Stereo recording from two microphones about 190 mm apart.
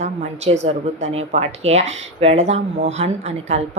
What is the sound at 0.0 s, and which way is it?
Speech, 35° right (ahead or behind).